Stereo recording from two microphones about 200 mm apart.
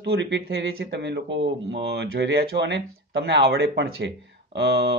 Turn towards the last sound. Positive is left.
turn(degrees=-60)  # may be behind; listen again after turning